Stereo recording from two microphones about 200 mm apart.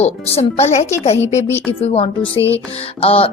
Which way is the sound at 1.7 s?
30° left (ahead or behind).